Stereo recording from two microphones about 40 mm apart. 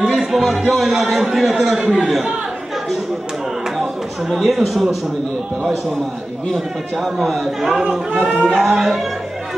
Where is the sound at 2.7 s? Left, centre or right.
Centre.